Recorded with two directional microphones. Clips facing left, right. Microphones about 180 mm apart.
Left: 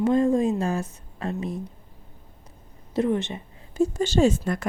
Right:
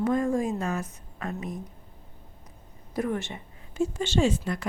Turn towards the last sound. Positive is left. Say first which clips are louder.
# left 4 dB
turn(degrees=45)  # may be behind; listen again after turning